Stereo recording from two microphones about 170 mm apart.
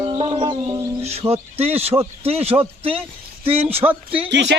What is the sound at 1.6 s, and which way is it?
Speech, 35° right (ahead or behind).